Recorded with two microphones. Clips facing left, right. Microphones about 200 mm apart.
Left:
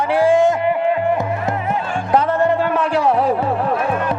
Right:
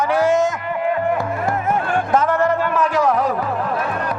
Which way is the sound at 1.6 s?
50° right (ahead or behind).